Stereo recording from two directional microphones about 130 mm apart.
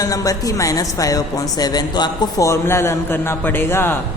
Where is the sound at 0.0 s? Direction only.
25° left (ahead or behind).